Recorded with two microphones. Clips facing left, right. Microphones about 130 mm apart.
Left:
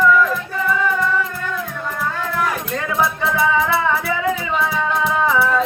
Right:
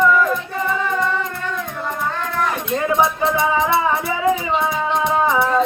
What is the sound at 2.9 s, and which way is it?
Music, 25° right (ahead or behind).